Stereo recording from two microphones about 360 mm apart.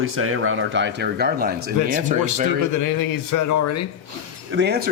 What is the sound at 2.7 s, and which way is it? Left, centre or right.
A man's voice, left.